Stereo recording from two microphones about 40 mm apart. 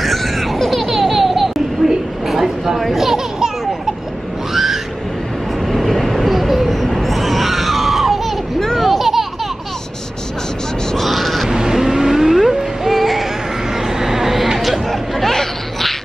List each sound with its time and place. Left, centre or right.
0.0 s a sound: centre
3.0 s children playing: centre
5.7 s train: centre
7.0 s screaming: centre
8.5 s children playing: centre
8.8 s a sound: centre
11.0 s crow: centre
11.5 s vehicle: centre
13.9 s chatter: centre